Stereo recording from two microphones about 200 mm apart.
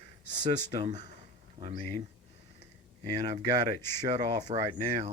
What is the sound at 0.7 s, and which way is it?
Speech, 20° right (ahead or behind).